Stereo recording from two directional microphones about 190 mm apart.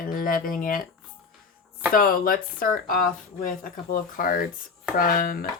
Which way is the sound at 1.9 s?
50° left (ahead or behind).